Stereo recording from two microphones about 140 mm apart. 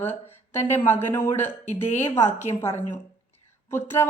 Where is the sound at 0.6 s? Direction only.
15° left (ahead or behind).